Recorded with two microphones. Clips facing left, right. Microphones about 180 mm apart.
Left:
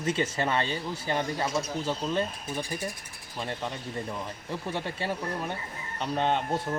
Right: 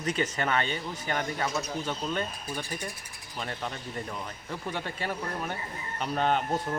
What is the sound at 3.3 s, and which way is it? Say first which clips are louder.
Speech: left 2 dB; 25° left (ahead or behind).